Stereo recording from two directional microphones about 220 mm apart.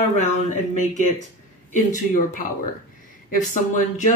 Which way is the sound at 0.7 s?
35° left (ahead or behind).